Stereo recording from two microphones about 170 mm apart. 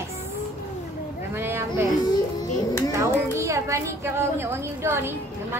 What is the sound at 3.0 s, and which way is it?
A woman's voice, 15° right (ahead or behind).